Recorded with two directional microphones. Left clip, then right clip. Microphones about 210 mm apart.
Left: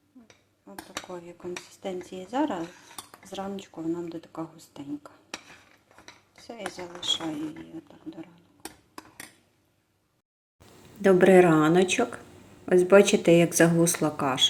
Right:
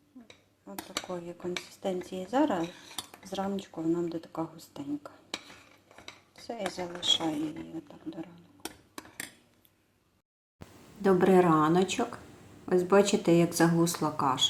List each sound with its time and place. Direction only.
0.6 s speech: centre (ahead or behind)
11.3 s speech: 10° left (ahead or behind)
11.6 s speech: 45° right (ahead or behind)
12.6 s speech: 10° left (ahead or behind)